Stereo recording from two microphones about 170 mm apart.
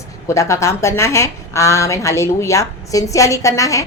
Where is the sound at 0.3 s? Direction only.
15° left (ahead or behind).